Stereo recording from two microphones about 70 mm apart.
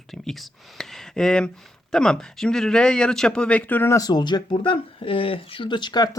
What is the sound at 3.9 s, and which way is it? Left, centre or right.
Speech, left.